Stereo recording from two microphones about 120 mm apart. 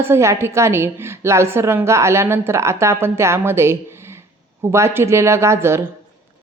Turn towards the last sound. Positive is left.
turn(degrees=-20)  # may be behind; listen again after turning